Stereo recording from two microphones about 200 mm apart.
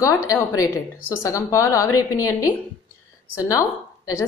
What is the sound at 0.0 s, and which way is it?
Speech, 15° left (ahead or behind).